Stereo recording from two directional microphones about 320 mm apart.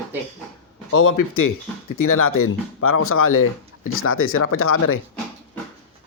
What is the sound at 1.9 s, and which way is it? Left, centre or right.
Speech, left.